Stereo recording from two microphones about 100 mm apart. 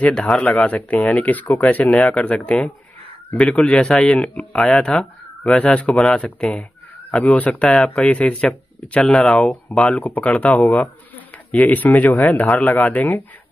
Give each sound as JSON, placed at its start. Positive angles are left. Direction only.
{"t": 0.0, "sound": "speech", "side_deg": 10}